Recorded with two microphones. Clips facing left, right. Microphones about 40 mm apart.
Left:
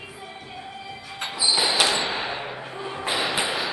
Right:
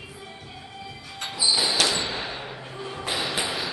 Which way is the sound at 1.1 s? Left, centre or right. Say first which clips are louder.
Left 1 dB; centre.